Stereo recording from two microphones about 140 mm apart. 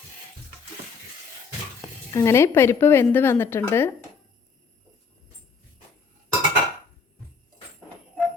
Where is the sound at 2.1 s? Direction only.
20° left (ahead or behind).